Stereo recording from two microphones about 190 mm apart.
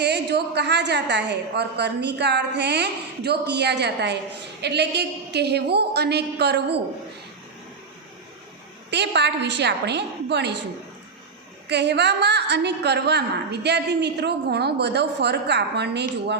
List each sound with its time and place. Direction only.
0.0 s a woman's voice: 60° right (ahead or behind)
8.9 s a woman's voice: 65° right (ahead or behind)
11.7 s a woman's voice: 65° right (ahead or behind)